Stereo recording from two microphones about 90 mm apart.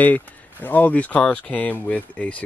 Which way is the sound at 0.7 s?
20° left (ahead or behind).